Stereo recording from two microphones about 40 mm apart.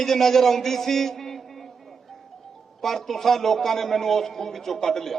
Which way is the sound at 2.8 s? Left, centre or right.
Centre.